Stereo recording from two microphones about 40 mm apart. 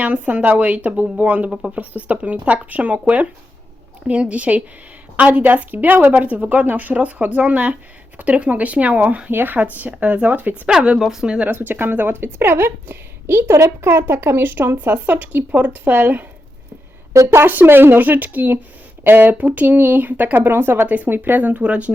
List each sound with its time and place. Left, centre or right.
0.0 s speech: right
4.0 s speech: right
9.3 s speech: right
9.6 s speech: right
11.0 s speech: centre
11.4 s a woman's voice: right
14.5 s speech: right
15.0 s speech: right
17.5 s speech: right
19.4 s speech: right
20.5 s a woman's voice: right
20.8 s speech: right
21.6 s speech: right